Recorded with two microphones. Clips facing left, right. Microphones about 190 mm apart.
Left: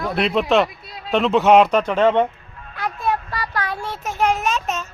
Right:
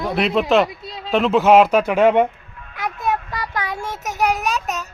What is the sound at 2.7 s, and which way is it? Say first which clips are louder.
Child singing: even; 15° right (ahead or behind).